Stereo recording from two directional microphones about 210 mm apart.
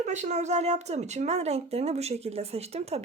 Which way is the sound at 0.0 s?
35° right (ahead or behind).